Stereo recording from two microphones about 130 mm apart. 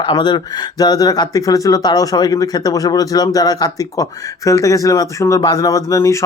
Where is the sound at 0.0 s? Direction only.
35° left (ahead or behind).